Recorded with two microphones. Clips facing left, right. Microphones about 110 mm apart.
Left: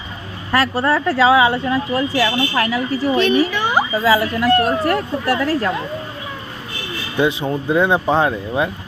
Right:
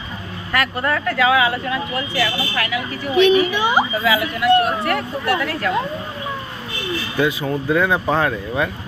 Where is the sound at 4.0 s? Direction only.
35° left (ahead or behind).